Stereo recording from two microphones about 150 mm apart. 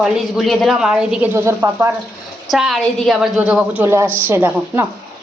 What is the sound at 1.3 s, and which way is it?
Speech, 15° right (ahead or behind).